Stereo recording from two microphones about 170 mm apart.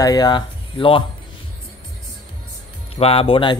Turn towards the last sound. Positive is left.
turn(degrees=30)  # may be behind; listen again after turning